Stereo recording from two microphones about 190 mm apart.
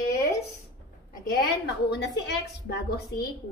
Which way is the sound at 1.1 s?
50° left (ahead or behind).